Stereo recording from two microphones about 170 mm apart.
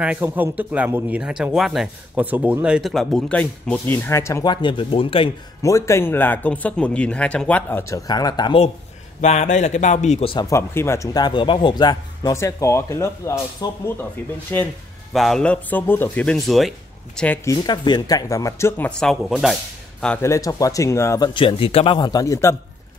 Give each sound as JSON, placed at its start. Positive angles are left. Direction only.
{"t": 0.0, "sound": "speech", "side_deg": -10}
{"t": 5.6, "sound": "speech", "side_deg": 20}
{"t": 9.2, "sound": "speech", "side_deg": 40}
{"t": 10.3, "sound": "speech", "side_deg": 20}
{"t": 17.5, "sound": "speech", "side_deg": 25}
{"t": 20.2, "sound": "speech", "side_deg": 20}